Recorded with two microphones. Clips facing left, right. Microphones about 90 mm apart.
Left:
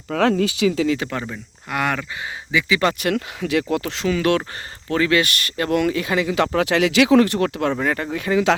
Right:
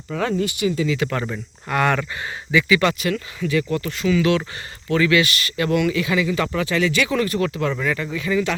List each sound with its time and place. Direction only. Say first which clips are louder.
0.1 s speech: left 4 dB; 75° left (ahead or behind)
1.2 s speech: right 3 dB; 5° left (ahead or behind)
2.5 s speech: right 2 dB; 20° left (ahead or behind)
3.0 s speech: left 2 dB; 65° left (ahead or behind); by 4.0 s 85° left
4.0 s speech: right 2 dB; 50° left (ahead or behind)
6.3 s speech: left 3 dB; 65° left (ahead or behind)